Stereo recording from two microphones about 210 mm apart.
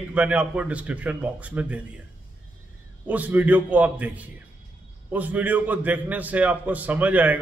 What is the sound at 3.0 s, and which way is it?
A man's voice, 5° right (ahead or behind).